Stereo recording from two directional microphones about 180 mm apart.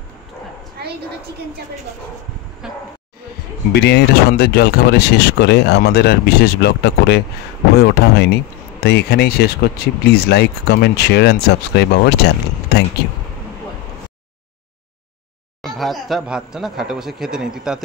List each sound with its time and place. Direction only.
2.6 s speech: 5° right (ahead or behind)
3.7 s speech: 65° left (ahead or behind)
15.6 s speech: centre (ahead or behind)